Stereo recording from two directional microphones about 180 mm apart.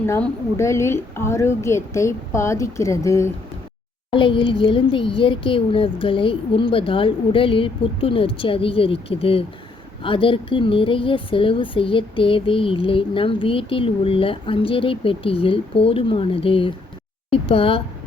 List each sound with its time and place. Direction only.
0.0 s a woman's voice: 15° left (ahead or behind)
4.1 s a woman's voice: 30° left (ahead or behind)